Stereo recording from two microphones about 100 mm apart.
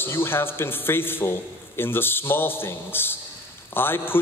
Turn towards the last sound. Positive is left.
turn(degrees=20)  # may be behind; listen again after turning